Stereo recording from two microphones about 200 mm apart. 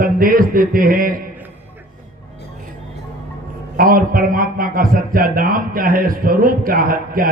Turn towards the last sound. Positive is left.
turn(degrees=-45)  # may be behind; listen again after turning